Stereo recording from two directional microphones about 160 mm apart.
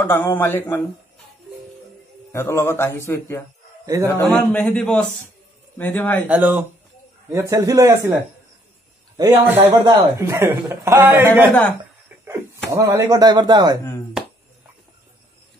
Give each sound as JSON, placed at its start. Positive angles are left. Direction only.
{"t": 0.0, "sound": "a man's voice", "side_deg": 15}
{"t": 2.3, "sound": "a man's voice", "side_deg": 15}
{"t": 3.8, "sound": "a man's voice", "side_deg": -20}
{"t": 4.1, "sound": "a man's voice", "side_deg": 10}
{"t": 6.2, "sound": "a man's voice", "side_deg": -10}
{"t": 9.1, "sound": "a man's voice", "side_deg": -15}
{"t": 12.7, "sound": "speech", "side_deg": -20}